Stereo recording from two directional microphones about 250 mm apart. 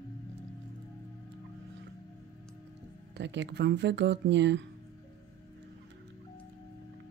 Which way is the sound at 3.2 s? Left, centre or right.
Right.